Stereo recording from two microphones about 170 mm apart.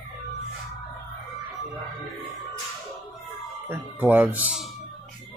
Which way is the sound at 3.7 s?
10° right (ahead or behind).